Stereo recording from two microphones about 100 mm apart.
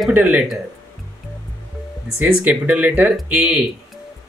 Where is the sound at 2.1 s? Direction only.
15° right (ahead or behind).